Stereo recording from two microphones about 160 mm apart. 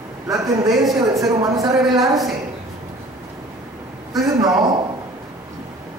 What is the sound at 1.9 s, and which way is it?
Speech, centre (ahead or behind).